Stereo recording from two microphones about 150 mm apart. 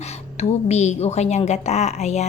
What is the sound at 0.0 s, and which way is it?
Speech, 45° left (ahead or behind).